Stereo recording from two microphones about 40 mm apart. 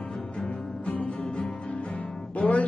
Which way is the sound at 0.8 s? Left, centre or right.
Left.